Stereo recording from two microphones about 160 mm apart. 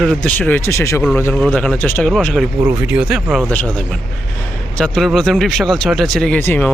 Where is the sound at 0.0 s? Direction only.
5° left (ahead or behind).